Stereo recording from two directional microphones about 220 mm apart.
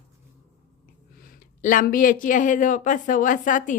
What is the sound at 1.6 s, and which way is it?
A woman's voice, 35° left (ahead or behind).